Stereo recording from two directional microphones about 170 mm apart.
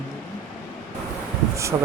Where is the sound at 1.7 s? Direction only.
15° right (ahead or behind).